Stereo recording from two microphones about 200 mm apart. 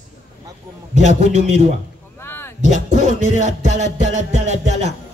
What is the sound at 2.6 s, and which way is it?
Music, 35° right (ahead or behind).